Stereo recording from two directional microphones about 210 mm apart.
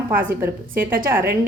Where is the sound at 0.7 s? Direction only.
40° right (ahead or behind).